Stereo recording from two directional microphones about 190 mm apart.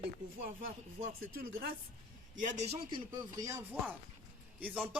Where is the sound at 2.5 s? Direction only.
35° right (ahead or behind).